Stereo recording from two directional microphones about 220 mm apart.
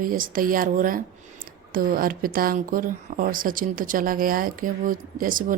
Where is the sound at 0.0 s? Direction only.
40° right (ahead or behind).